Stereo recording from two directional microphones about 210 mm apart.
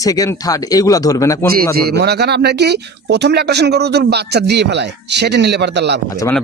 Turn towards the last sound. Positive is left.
turn(degrees=-55)  # may be behind; listen again after turning